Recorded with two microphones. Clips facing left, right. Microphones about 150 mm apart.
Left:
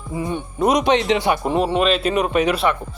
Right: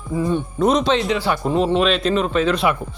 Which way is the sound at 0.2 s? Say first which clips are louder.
Right 3 dB; 15° left (ahead or behind).